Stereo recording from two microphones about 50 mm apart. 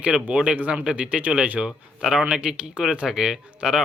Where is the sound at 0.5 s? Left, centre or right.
Right.